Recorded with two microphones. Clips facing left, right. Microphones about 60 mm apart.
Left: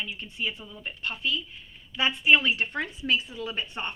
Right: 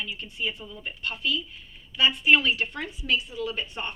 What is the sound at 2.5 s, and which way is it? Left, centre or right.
A woman's voice, left.